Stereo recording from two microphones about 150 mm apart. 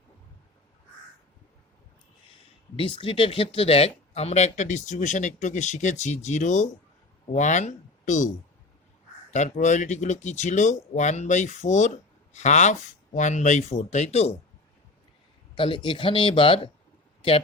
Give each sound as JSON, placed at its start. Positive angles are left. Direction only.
{"t": 2.7, "sound": "speech", "side_deg": 35}
{"t": 15.5, "sound": "speech", "side_deg": 35}